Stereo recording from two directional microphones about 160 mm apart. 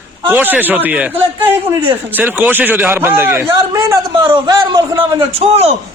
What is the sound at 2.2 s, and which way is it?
A man's voice, 10° right (ahead or behind).